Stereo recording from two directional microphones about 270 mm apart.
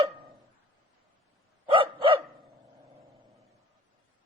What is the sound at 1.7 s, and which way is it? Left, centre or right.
Dog, centre.